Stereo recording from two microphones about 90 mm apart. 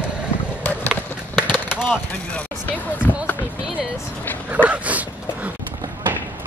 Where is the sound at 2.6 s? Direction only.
20° left (ahead or behind).